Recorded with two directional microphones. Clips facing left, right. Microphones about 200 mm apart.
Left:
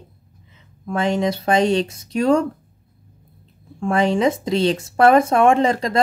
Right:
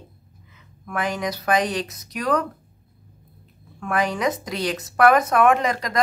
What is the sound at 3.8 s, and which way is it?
Speech, 25° left (ahead or behind).